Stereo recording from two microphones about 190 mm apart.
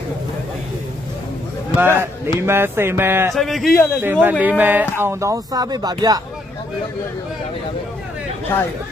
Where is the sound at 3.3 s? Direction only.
Centre (ahead or behind); by 6.2 s 20° right (ahead or behind).